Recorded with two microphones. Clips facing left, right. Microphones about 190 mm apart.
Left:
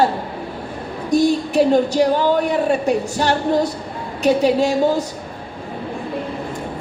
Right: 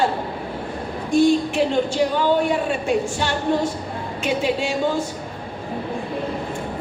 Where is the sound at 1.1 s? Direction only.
40° left (ahead or behind).